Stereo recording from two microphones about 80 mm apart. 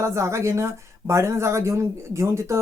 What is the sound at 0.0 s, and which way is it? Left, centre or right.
Speech, right.